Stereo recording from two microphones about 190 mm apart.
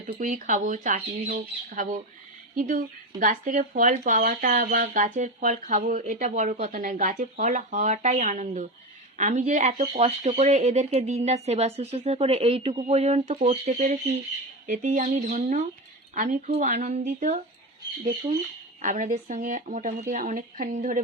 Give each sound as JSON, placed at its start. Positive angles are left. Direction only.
{"t": 0.0, "sound": "speech", "side_deg": -40}